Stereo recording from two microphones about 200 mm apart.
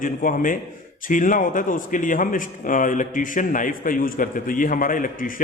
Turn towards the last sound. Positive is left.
turn(degrees=45)  # may be behind; listen again after turning